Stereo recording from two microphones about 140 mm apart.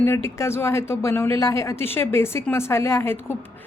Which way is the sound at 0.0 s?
15° left (ahead or behind).